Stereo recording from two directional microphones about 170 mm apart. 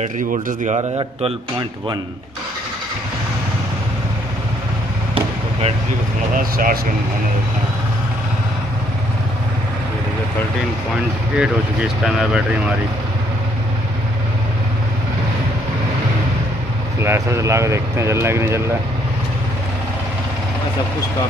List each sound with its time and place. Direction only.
0.0 s speech: 45° right (ahead or behind)
0.7 s a man's voice: 30° right (ahead or behind)
6.3 s speech: 55° right (ahead or behind)
11.3 s speech: 5° right (ahead or behind)
17.0 s speech: 15° right (ahead or behind)